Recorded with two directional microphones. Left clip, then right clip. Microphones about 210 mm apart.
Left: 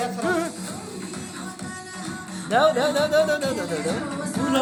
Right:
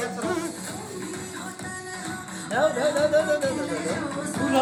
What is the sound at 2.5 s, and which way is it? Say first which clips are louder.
Speech: left 3 dB; 50° left (ahead or behind).